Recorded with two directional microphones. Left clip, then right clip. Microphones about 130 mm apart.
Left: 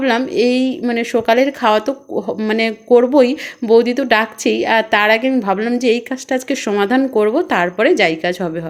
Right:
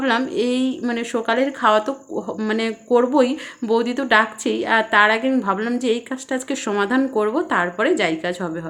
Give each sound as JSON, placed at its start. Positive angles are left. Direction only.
{"t": 0.0, "sound": "a woman's voice", "side_deg": 30}
{"t": 5.9, "sound": "a woman's voice", "side_deg": 40}